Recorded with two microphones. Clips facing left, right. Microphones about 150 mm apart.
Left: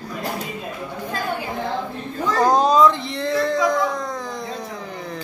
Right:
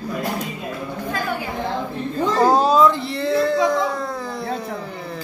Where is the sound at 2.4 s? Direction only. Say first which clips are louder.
Even; 5° right (ahead or behind).